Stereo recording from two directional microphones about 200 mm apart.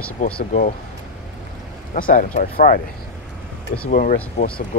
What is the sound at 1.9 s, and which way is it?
Speech, 40° left (ahead or behind).